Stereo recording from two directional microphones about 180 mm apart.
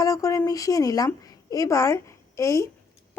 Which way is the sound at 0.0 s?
20° left (ahead or behind).